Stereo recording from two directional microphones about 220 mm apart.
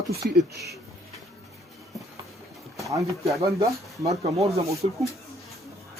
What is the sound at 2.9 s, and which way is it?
Speech, 15° right (ahead or behind).